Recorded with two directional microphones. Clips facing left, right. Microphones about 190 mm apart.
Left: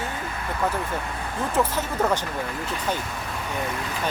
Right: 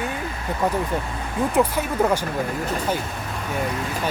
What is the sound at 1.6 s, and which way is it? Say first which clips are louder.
Speech: right 3 dB; 10° right (ahead or behind).